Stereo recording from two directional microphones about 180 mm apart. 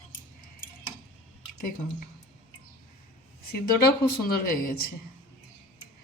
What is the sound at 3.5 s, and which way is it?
Speech, 60° left (ahead or behind).